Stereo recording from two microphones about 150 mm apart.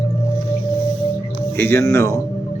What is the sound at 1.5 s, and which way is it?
Speech, 15° left (ahead or behind).